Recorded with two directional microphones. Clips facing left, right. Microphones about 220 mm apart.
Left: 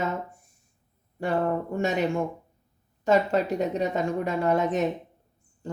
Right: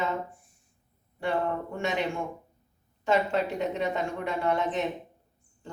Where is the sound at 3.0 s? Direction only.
40° left (ahead or behind).